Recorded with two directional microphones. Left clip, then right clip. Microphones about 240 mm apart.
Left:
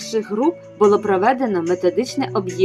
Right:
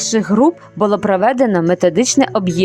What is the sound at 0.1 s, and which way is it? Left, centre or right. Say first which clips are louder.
Speech: right 5 dB; right.